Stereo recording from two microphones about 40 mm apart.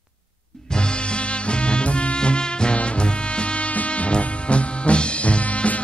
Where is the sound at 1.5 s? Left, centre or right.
Left.